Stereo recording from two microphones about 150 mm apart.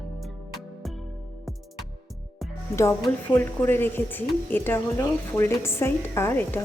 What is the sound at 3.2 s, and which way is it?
Speech, 15° left (ahead or behind).